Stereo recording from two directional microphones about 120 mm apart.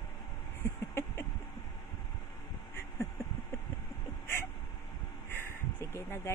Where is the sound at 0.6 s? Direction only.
20° left (ahead or behind).